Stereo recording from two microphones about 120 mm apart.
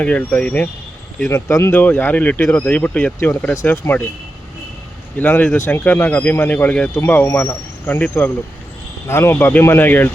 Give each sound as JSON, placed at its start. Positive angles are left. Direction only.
{"t": 0.0, "sound": "speech", "side_deg": 15}
{"t": 1.3, "sound": "speech", "side_deg": 20}
{"t": 5.1, "sound": "speech", "side_deg": 15}